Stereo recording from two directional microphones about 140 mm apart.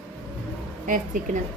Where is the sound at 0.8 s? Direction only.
70° right (ahead or behind).